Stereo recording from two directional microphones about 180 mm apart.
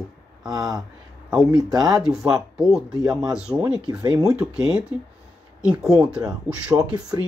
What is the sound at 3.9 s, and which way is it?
Speech, 20° right (ahead or behind).